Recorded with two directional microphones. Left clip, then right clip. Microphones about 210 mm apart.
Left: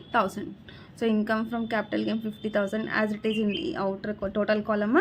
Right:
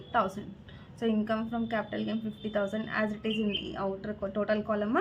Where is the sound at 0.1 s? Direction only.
45° left (ahead or behind).